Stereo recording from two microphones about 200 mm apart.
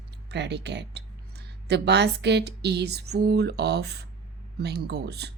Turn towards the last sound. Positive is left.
turn(degrees=-55)  # may be behind; listen again after turning